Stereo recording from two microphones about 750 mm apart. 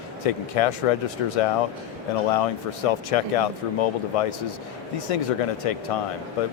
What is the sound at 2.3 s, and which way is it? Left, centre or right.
Speech, left.